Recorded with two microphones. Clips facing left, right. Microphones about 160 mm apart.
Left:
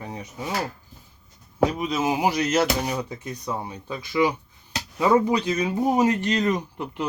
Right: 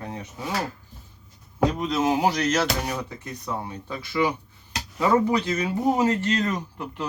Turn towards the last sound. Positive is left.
turn(degrees=15)  # may be behind; listen again after turning